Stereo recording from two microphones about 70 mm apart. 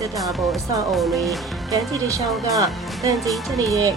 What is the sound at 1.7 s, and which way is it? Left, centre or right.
Speech, right.